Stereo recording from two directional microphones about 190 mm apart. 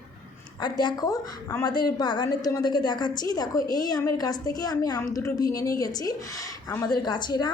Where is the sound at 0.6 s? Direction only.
20° left (ahead or behind).